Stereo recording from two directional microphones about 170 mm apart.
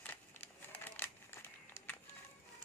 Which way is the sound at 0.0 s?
10° left (ahead or behind).